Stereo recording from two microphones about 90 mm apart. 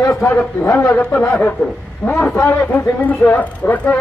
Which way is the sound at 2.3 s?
20° left (ahead or behind).